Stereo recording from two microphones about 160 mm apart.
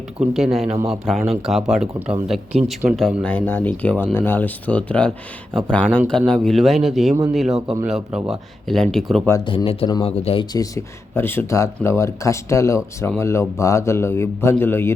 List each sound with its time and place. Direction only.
0.2 s speech: 5° right (ahead or behind)
9.5 s speech: 30° left (ahead or behind)
10.5 s speech: 20° left (ahead or behind)